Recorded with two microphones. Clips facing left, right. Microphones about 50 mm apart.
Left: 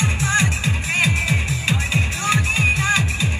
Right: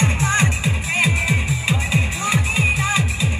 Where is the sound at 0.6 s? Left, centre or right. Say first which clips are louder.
Even; centre.